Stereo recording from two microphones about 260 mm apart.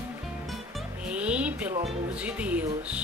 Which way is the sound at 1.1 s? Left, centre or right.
Centre.